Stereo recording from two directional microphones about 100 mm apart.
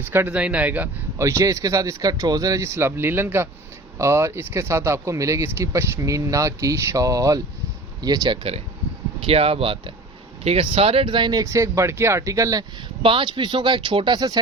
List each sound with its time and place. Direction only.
0.1 s speech: 20° right (ahead or behind)
1.2 s speech: 30° right (ahead or behind)
9.2 s speech: 70° right (ahead or behind)
10.4 s speech: 85° right; by 11.3 s 55° right (ahead or behind)
11.3 s speech: 30° right (ahead or behind)
13.0 s speech: 60° right (ahead or behind); by 14.3 s 45° right (ahead or behind)